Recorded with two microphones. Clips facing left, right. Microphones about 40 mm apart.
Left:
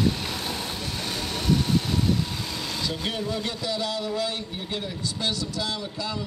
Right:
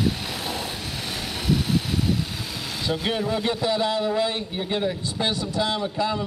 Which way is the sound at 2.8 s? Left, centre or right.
Centre.